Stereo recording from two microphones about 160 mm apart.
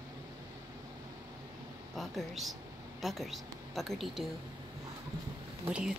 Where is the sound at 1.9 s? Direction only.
Centre (ahead or behind).